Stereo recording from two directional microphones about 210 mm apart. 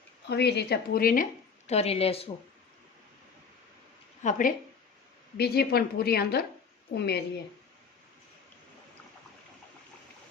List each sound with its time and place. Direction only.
0.3 s a woman's voice: 50° left (ahead or behind); by 2.3 s 25° left (ahead or behind)
4.2 s a woman's voice: 40° left (ahead or behind)